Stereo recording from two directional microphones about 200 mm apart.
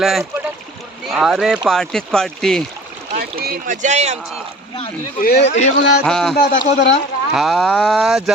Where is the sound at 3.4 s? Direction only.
45° right (ahead or behind).